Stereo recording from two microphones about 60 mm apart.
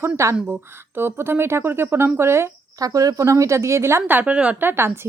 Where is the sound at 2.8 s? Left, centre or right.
Right.